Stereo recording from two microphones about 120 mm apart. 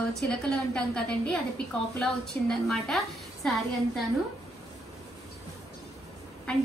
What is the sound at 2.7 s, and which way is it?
A woman's voice, centre (ahead or behind).